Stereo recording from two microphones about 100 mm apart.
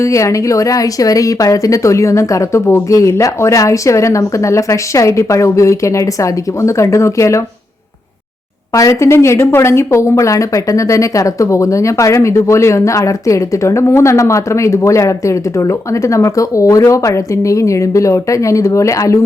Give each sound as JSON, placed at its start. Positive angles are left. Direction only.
{"t": 0.0, "sound": "speech", "side_deg": 30}
{"t": 8.7, "sound": "speech", "side_deg": 30}